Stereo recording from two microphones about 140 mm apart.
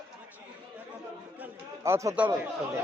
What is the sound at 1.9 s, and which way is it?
Speech, 20° right (ahead or behind).